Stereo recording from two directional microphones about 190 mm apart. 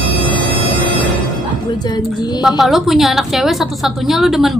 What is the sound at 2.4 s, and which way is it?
A woman's voice, centre (ahead or behind).